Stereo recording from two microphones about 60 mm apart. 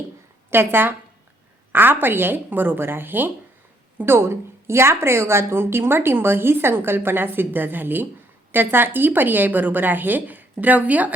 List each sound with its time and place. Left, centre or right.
0.5 s a woman's voice: right